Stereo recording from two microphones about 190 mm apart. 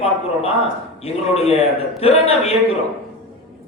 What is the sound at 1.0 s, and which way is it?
A man's voice, 35° left (ahead or behind).